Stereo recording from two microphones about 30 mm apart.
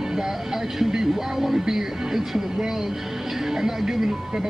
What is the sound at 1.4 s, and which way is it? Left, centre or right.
Music, centre.